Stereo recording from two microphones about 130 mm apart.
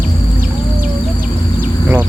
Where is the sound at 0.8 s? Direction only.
90° right.